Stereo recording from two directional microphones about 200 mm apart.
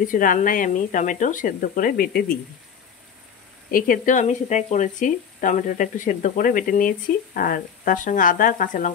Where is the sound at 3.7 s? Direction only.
40° left (ahead or behind).